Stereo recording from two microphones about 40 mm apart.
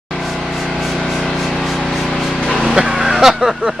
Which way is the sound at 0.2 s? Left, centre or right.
Centre.